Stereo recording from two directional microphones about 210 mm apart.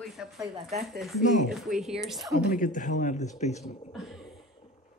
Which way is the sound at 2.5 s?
40° left (ahead or behind).